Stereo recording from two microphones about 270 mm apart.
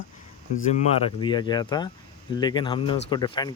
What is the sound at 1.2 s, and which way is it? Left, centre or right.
Speech, centre.